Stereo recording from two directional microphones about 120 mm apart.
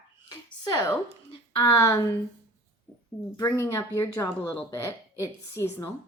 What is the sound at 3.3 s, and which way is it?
Speech, 25° left (ahead or behind).